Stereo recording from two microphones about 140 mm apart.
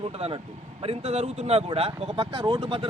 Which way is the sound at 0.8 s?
45° right (ahead or behind).